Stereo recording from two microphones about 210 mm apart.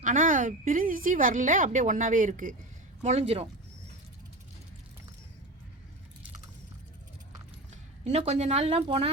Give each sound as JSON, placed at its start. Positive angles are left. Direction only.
{"t": 0.0, "sound": "a woman's voice", "side_deg": -40}
{"t": 8.0, "sound": "a woman's voice", "side_deg": -30}